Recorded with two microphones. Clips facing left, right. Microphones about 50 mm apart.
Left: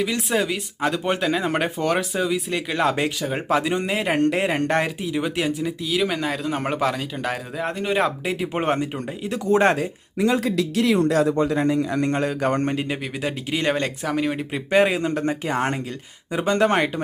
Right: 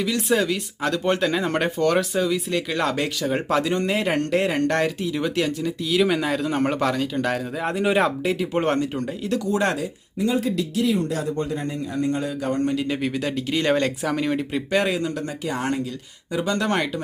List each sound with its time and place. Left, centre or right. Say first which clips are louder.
0.2 s speech: right 1 dB; centre
5.8 s a man's voice: right 4 dB; centre
9.4 s speech: left 7 dB; left
10.2 s a man's voice: left 2 dB; left
12.6 s speech: right 1 dB; left
13.0 s speech: right 3 dB; centre; by 17.0 s left